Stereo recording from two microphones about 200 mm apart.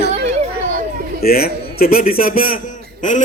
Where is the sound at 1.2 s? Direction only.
50° left (ahead or behind).